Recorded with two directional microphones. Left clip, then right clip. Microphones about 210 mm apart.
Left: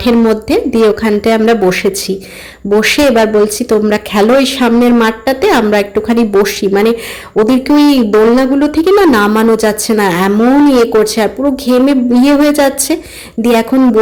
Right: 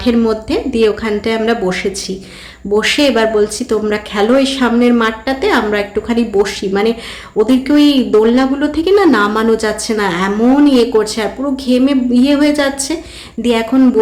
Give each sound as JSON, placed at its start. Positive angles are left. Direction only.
{"t": 0.0, "sound": "speech", "side_deg": 30}